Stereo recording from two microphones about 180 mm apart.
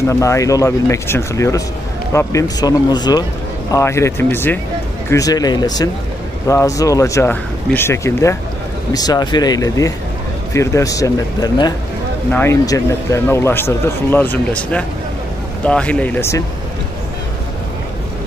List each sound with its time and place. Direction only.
0.1 s speech: 15° left (ahead or behind)